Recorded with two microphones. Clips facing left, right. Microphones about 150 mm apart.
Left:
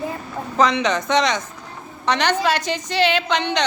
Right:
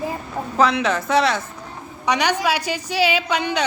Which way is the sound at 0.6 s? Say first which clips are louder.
Even; 5° right (ahead or behind).